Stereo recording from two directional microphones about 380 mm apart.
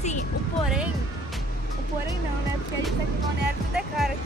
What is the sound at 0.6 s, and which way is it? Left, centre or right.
Speech, centre.